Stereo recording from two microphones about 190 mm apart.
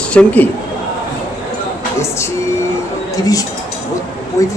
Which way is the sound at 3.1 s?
20° left (ahead or behind).